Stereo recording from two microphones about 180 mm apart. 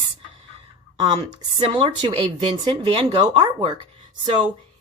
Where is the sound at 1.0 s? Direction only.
25° right (ahead or behind).